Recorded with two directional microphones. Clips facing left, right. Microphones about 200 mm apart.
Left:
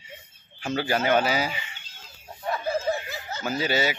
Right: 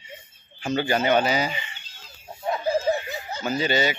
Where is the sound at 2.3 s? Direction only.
20° right (ahead or behind).